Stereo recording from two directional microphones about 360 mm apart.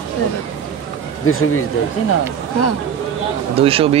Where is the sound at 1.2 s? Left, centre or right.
Left.